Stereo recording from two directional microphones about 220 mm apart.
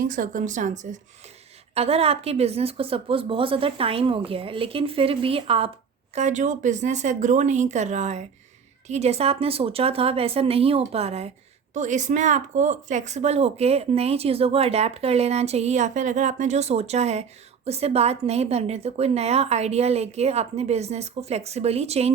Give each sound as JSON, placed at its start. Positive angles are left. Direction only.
{"t": 0.0, "sound": "speech", "side_deg": -35}